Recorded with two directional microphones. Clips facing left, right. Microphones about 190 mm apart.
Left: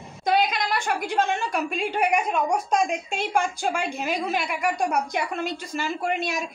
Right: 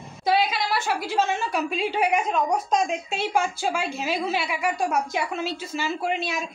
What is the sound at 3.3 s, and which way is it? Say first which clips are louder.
A woman's voice: left 1 dB; 5° right (ahead or behind).